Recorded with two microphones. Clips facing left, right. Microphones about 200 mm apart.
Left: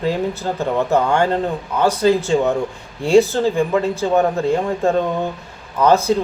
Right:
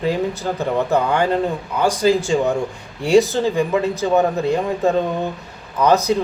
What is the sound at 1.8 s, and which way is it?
Speech, 10° right (ahead or behind).